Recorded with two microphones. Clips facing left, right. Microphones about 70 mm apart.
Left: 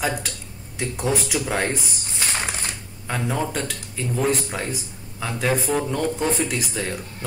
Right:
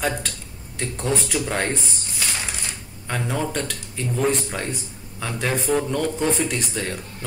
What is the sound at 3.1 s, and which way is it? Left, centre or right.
A man's voice, centre.